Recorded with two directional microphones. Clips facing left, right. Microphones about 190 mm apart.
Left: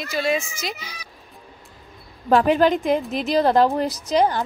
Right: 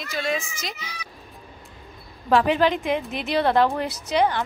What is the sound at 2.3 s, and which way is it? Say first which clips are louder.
A woman's voice: left 3 dB; 45° left (ahead or behind).